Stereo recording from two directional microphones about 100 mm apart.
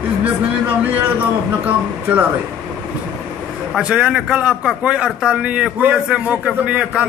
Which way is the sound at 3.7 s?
10° right (ahead or behind).